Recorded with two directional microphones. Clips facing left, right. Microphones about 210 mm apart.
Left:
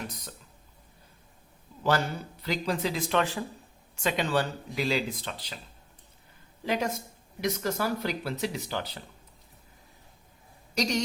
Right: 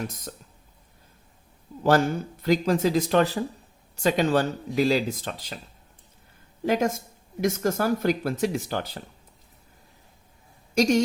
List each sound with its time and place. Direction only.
1.8 s speech: 50° right (ahead or behind)
6.7 s speech: 45° right (ahead or behind)
10.8 s speech: 50° right (ahead or behind)